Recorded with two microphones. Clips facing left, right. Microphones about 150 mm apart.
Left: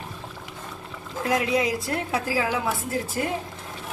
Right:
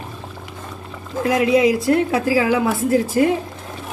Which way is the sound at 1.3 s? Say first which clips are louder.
Right 8 dB; 90° right.